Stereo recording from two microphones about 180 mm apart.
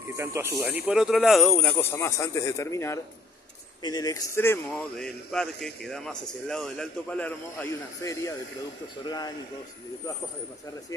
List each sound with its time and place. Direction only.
0.2 s speech: 15° right (ahead or behind)
0.8 s speech: centre (ahead or behind); by 4.8 s 15° left (ahead or behind)
4.9 s a man's voice: 5° left (ahead or behind); by 9.3 s 20° left (ahead or behind)